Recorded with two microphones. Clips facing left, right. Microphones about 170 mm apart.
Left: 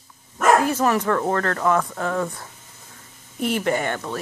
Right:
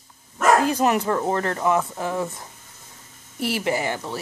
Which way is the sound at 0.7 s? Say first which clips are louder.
Even; 20° right (ahead or behind).